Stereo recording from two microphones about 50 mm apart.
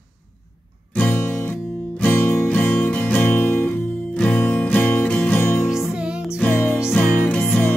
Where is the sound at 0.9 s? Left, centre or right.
Left.